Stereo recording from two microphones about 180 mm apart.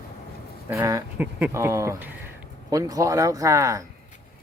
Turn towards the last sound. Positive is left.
turn(degrees=-20)  # may be behind; listen again after turning